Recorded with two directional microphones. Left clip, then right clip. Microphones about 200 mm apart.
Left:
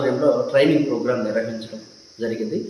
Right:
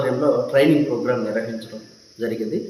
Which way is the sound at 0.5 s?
10° right (ahead or behind).